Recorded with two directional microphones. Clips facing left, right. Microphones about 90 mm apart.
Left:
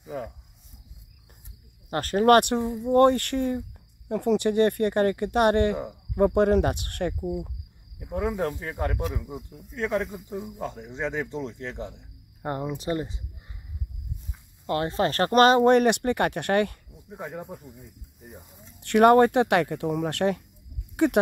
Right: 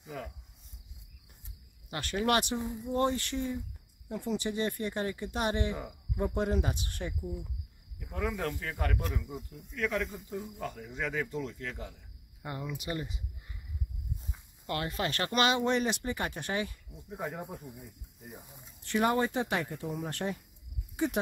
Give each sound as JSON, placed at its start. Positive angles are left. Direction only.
{"t": 0.1, "sound": "cricket", "side_deg": 25}
{"t": 1.9, "sound": "speech", "side_deg": 45}
{"t": 2.5, "sound": "speech", "side_deg": 80}
{"t": 8.0, "sound": "cricket", "side_deg": 25}
{"t": 9.3, "sound": "speech", "side_deg": 0}
{"t": 9.7, "sound": "speech", "side_deg": 35}
{"t": 10.3, "sound": "cricket", "side_deg": 15}
{"t": 12.4, "sound": "speech", "side_deg": 45}
{"t": 14.7, "sound": "speech", "side_deg": 30}
{"t": 16.9, "sound": "speech", "side_deg": 0}
{"t": 18.8, "sound": "speech", "side_deg": 65}